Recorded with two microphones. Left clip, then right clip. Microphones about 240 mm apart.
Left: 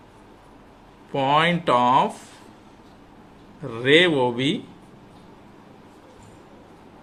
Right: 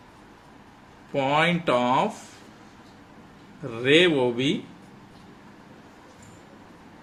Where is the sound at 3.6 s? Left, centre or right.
Left.